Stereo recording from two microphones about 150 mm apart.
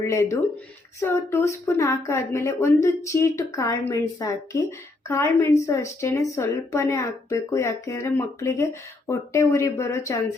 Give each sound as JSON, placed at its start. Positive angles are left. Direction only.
{"t": 0.0, "sound": "speech", "side_deg": 20}